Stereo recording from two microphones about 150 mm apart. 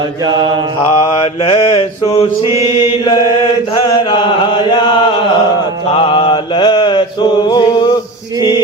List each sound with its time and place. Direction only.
0.3 s mantra: 30° right (ahead or behind)
0.9 s mantra: 35° left (ahead or behind)
2.4 s mantra: 20° right (ahead or behind)
2.6 s mantra: 30° left (ahead or behind)
3.8 s chant: 30° left (ahead or behind)
5.9 s mantra: 35° left (ahead or behind)
8.4 s music: 30° left (ahead or behind)